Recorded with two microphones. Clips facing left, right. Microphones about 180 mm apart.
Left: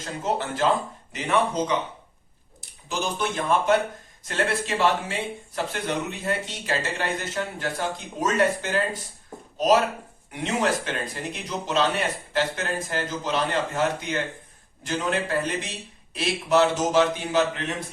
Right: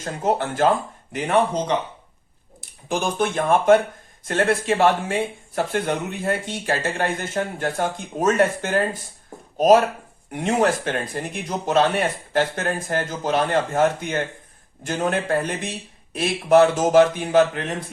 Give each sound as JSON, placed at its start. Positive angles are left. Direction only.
{"t": 0.0, "sound": "speech", "side_deg": -50}
{"t": 2.6, "sound": "speech", "side_deg": -50}